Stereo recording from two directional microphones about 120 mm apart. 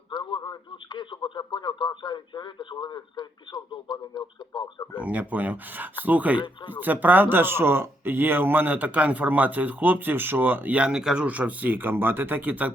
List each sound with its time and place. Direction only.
0.1 s speech: 40° left (ahead or behind)
5.0 s speech: 15° right (ahead or behind)